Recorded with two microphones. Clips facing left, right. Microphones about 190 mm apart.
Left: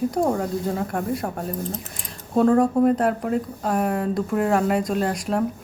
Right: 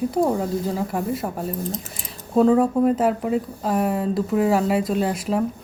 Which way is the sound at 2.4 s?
Centre (ahead or behind).